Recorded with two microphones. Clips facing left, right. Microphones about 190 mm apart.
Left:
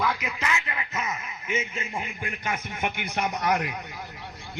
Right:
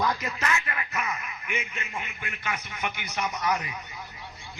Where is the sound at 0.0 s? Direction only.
10° left (ahead or behind).